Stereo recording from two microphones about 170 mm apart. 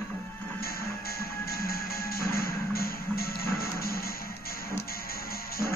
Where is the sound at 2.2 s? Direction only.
60° left (ahead or behind).